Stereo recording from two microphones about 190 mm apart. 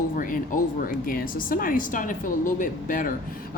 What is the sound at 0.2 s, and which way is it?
Speech, 45° left (ahead or behind).